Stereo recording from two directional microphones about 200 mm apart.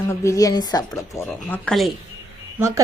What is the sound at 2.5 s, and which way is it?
Speech, 15° right (ahead or behind).